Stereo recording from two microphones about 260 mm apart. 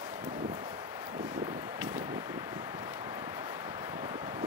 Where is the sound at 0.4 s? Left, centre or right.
Centre.